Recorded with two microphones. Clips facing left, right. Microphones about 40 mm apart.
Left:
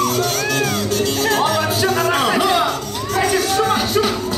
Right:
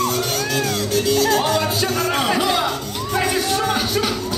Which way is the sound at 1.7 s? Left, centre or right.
Centre.